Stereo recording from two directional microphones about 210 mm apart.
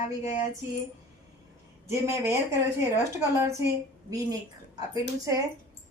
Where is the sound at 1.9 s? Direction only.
15° right (ahead or behind).